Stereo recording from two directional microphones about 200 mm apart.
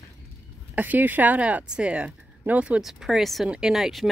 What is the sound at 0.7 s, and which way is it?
Speech, 10° right (ahead or behind).